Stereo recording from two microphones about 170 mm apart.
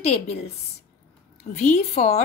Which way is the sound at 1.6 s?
45° left (ahead or behind).